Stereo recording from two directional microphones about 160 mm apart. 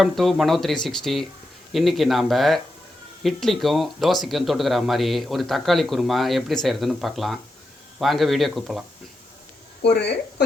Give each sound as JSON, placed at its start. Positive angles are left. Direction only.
{"t": 0.0, "sound": "speech", "side_deg": 0}
{"t": 9.8, "sound": "a woman's voice", "side_deg": 90}